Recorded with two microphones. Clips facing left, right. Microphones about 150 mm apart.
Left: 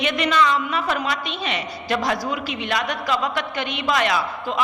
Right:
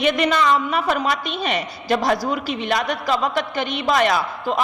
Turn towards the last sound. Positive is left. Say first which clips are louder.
# right 2 dB
turn(degrees=-40)  # may be behind; listen again after turning